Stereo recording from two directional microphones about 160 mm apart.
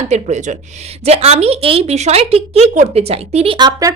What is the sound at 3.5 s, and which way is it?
Speech, 25° right (ahead or behind).